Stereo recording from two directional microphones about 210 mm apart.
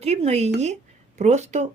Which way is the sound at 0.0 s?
30° right (ahead or behind).